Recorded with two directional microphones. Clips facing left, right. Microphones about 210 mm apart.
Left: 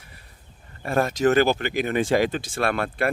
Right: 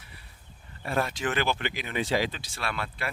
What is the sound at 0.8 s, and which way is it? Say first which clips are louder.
Speech: left 7 dB; 45° left (ahead or behind).